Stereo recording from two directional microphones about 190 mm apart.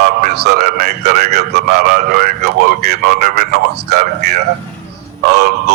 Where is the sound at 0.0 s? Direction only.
50° right (ahead or behind).